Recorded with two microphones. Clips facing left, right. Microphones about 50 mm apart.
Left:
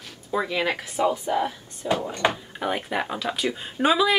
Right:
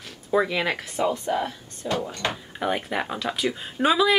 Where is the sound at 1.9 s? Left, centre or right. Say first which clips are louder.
Left 4 dB; centre.